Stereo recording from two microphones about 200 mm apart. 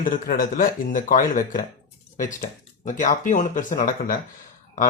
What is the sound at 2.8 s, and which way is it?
Speech, 40° left (ahead or behind).